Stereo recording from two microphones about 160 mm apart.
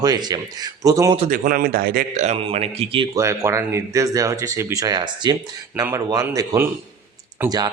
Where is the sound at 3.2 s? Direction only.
20° right (ahead or behind).